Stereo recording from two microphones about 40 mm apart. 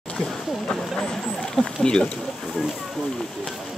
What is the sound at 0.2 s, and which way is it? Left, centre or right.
Speech, centre.